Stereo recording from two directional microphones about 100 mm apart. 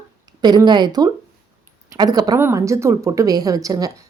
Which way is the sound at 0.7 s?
45° right (ahead or behind).